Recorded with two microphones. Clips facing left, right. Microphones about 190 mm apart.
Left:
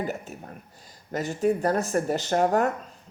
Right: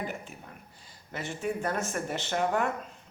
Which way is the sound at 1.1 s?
40° left (ahead or behind).